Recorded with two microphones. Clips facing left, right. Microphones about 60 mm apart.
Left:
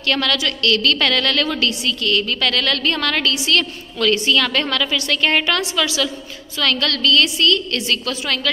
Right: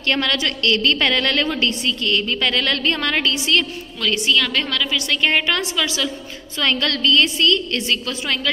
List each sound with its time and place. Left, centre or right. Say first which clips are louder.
0.1 s a woman's voice: left 1 dB; right
4.0 s a woman's voice: left 3 dB; centre
5.2 s a woman's voice: left 1 dB; centre
6.6 s a woman's voice: left 1 dB; right